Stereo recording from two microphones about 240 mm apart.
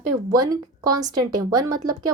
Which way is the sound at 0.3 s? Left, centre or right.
Centre.